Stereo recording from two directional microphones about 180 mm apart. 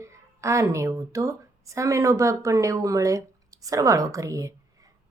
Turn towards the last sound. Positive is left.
turn(degrees=-20)  # may be behind; listen again after turning